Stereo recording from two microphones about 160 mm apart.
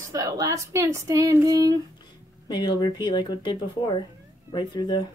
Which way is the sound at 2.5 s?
25° left (ahead or behind).